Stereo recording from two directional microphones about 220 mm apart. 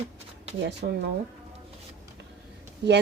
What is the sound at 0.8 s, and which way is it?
Speech, 45° right (ahead or behind).